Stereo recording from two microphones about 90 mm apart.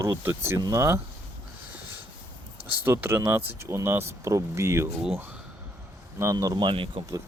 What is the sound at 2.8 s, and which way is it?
Speech, 25° right (ahead or behind).